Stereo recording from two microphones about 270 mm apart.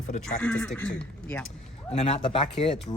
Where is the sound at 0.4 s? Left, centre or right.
Centre.